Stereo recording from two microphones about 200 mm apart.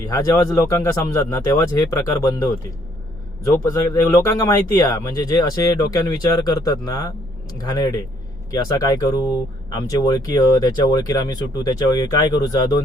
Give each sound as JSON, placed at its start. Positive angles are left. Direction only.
{"t": 0.0, "sound": "a man's voice", "side_deg": 15}